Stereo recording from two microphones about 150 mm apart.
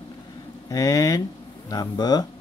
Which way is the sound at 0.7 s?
25° left (ahead or behind).